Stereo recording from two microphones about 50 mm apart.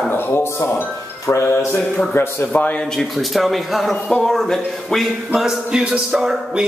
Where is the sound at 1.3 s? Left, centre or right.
Left.